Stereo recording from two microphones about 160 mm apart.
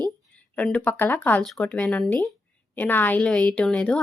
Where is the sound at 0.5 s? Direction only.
10° left (ahead or behind).